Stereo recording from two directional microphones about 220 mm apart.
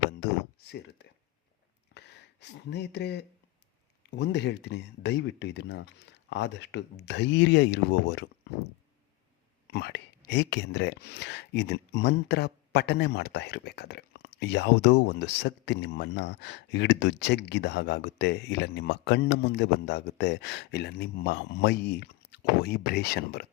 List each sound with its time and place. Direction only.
0.7 s speech: 50° left (ahead or behind)
1.9 s a sound: 50° left (ahead or behind)
4.1 s speech: 50° left (ahead or behind)
9.7 s speech: 50° left (ahead or behind)